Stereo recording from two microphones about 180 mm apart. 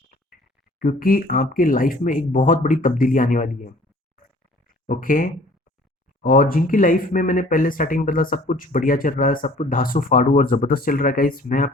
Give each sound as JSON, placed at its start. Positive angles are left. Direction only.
{"t": 0.8, "sound": "speech", "side_deg": 50}
{"t": 4.9, "sound": "speech", "side_deg": 50}